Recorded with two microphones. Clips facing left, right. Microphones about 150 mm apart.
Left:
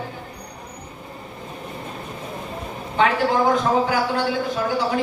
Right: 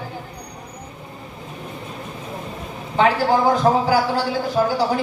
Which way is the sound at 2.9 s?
35° right (ahead or behind).